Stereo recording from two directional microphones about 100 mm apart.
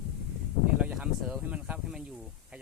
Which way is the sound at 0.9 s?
5° right (ahead or behind).